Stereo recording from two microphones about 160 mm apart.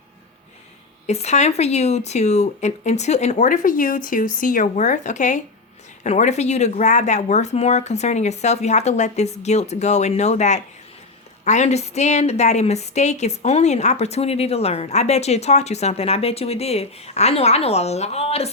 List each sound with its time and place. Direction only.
1.0 s a woman's voice: 45° left (ahead or behind)